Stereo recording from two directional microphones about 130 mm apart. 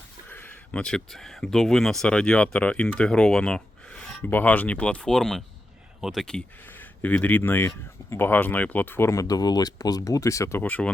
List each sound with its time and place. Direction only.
0.3 s speech: 15° left (ahead or behind)